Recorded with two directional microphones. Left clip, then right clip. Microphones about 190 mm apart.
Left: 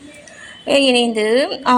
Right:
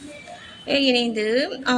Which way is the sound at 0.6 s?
20° left (ahead or behind).